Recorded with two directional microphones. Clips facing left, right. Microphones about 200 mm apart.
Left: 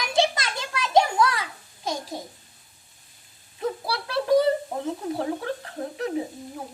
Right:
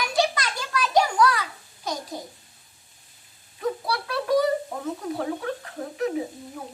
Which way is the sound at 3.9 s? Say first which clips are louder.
Left 3 dB; 30° left (ahead or behind).